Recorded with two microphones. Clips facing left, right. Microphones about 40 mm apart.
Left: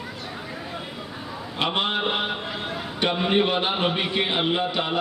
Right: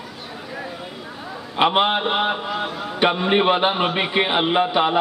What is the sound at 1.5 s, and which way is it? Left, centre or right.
A man's voice, right.